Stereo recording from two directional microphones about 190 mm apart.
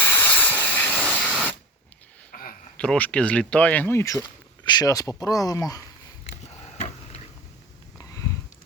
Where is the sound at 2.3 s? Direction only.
50° left (ahead or behind).